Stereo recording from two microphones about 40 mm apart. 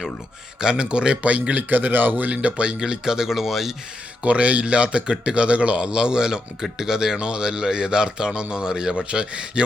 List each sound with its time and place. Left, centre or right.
0.6 s speech: right
1.7 s speech: right
2.3 s speech: right
2.7 s speech: centre
4.2 s speech: right